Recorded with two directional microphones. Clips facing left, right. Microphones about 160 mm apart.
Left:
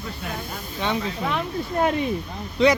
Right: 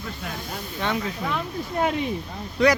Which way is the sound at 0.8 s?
25° left (ahead or behind).